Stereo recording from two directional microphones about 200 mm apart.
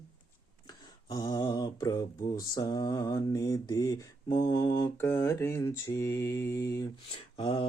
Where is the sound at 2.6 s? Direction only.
20° left (ahead or behind).